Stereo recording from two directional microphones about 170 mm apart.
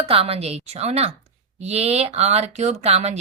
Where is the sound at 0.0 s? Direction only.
35° right (ahead or behind).